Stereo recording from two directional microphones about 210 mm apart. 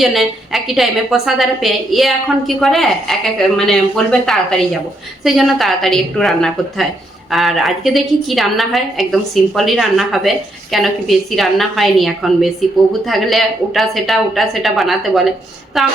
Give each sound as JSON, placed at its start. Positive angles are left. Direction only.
{"t": 0.0, "sound": "a woman's voice", "side_deg": 0}